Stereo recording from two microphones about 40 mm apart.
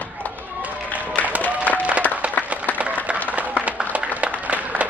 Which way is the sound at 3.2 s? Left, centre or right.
Right.